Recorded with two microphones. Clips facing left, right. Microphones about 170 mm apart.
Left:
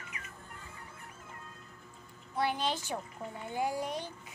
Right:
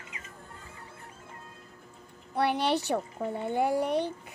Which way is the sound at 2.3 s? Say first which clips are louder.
Right 6 dB; 70° right (ahead or behind).